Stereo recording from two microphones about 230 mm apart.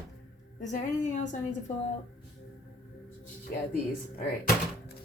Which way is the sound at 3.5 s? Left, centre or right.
Left.